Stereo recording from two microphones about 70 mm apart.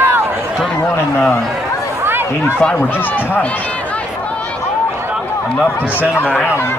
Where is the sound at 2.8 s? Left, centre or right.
Left.